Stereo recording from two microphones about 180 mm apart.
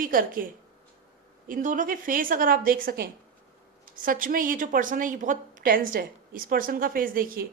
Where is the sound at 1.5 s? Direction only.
50° right (ahead or behind).